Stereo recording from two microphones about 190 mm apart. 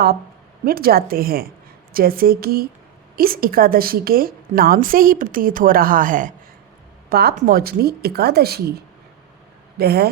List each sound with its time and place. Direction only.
0.6 s a woman's voice: 50° right (ahead or behind)
7.1 s a woman's voice: 55° right (ahead or behind)
9.7 s a woman's voice: 55° right (ahead or behind)